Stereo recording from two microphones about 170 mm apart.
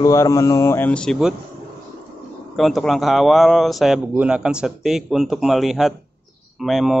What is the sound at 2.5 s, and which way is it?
Speech, centre (ahead or behind).